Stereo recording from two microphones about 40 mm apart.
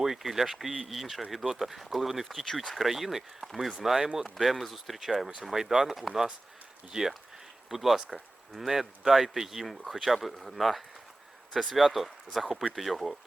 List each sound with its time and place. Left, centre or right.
0.0 s speech: centre
7.7 s speech: centre